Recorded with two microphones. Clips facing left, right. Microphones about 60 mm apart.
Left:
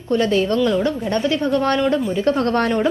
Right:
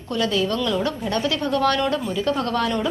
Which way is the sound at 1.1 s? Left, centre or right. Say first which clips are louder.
Left 3 dB; left.